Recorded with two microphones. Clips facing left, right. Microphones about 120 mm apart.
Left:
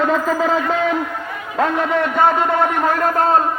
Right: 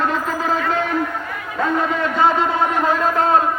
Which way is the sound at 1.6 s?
65° left (ahead or behind).